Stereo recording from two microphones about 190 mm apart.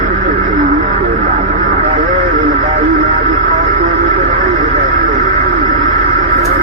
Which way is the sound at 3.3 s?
45° right (ahead or behind).